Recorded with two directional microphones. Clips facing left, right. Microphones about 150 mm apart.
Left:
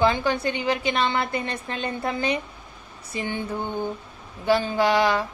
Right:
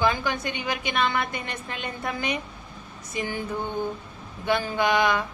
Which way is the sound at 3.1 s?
30° left (ahead or behind).